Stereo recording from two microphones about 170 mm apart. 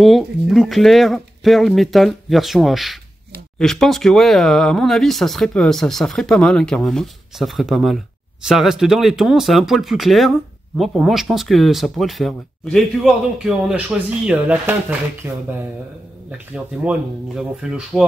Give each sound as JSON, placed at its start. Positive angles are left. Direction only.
{"t": 0.0, "sound": "speech", "side_deg": 0}